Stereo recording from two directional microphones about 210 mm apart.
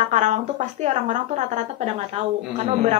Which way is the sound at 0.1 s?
35° right (ahead or behind).